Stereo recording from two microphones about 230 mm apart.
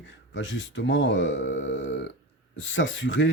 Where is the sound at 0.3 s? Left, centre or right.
Left.